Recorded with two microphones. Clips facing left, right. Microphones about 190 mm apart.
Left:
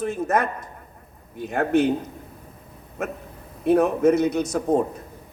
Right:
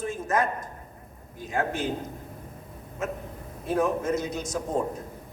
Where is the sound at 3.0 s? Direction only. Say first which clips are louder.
Left 2 dB; 65° left (ahead or behind).